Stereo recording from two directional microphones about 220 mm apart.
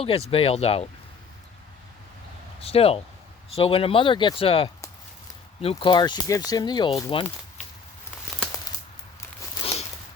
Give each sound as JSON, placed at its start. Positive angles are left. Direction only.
{"t": 0.0, "sound": "speech", "side_deg": 25}
{"t": 2.6, "sound": "speech", "side_deg": 25}